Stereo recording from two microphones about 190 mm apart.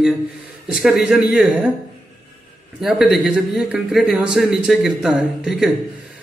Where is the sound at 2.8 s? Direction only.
Centre (ahead or behind).